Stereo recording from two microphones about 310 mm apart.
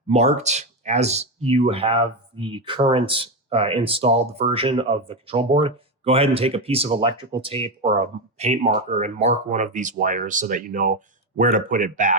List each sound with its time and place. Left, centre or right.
0.1 s speech: right